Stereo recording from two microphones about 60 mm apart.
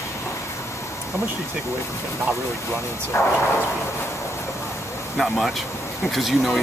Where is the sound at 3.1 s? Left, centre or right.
Left.